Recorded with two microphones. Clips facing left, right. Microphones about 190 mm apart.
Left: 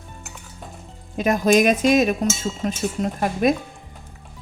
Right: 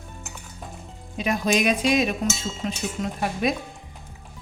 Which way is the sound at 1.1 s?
45° left (ahead or behind).